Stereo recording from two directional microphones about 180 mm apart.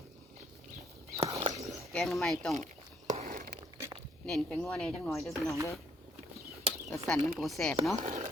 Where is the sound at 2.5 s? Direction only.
40° right (ahead or behind).